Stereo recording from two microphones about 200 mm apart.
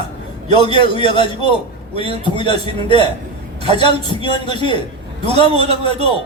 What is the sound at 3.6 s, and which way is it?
Speech, 30° right (ahead or behind).